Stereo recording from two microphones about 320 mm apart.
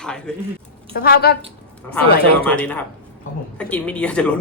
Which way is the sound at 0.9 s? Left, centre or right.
Left.